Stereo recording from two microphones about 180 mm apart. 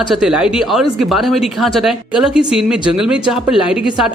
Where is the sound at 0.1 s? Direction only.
5° right (ahead or behind).